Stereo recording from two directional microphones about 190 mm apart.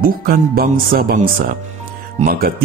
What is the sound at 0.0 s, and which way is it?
Speech, 50° right (ahead or behind).